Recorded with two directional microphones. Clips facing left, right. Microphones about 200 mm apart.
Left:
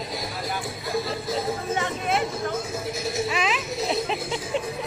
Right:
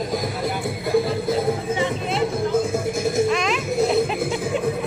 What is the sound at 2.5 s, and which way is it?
Vehicle, 50° right (ahead or behind).